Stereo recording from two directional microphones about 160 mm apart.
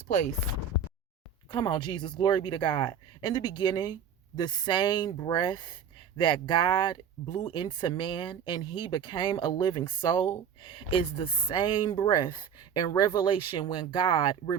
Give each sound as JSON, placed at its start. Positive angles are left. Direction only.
{"t": 0.1, "sound": "speech", "side_deg": 50}
{"t": 1.5, "sound": "speech", "side_deg": 25}